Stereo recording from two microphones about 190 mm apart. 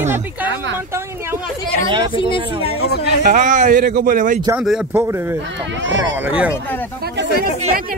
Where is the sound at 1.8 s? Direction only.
25° right (ahead or behind).